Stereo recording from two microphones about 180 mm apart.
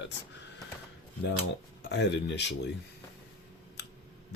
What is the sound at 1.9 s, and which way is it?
Speech, 75° left (ahead or behind).